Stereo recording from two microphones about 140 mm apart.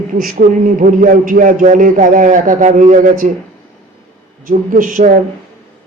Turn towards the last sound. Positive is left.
turn(degrees=-75)  # may be behind; listen again after turning